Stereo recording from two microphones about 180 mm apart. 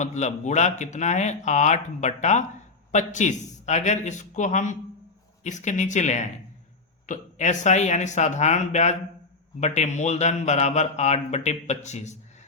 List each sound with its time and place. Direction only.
0.0 s a man's voice: 40° left (ahead or behind)